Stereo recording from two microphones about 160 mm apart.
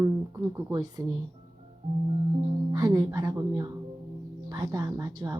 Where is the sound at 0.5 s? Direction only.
25° right (ahead or behind).